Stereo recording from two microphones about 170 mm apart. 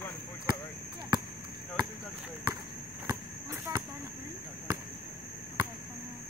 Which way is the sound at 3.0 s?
20° right (ahead or behind).